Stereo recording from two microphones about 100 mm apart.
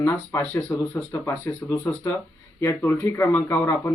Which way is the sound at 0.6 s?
15° left (ahead or behind).